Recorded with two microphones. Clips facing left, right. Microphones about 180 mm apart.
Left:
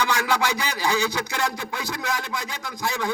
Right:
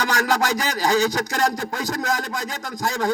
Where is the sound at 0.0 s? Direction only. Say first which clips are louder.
Right 2 dB; 40° right (ahead or behind).